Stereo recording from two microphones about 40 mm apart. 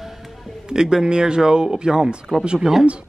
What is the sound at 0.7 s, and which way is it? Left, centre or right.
A man's voice, centre.